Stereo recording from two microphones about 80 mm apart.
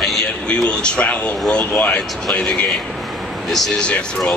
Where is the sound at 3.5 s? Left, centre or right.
Centre.